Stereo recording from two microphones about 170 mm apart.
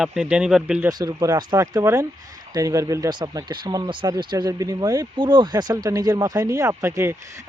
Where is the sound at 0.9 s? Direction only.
20° right (ahead or behind).